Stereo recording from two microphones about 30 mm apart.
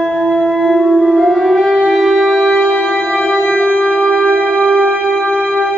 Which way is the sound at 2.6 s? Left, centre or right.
Left.